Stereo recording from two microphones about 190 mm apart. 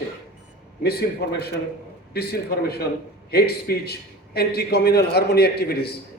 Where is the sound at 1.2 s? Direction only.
60° left (ahead or behind).